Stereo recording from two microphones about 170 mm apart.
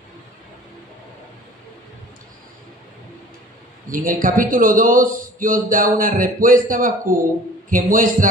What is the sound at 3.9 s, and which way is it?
A man's voice, 55° right (ahead or behind).